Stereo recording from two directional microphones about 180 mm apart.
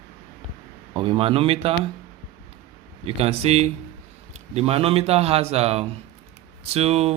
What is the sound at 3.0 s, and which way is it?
Speech, 35° right (ahead or behind).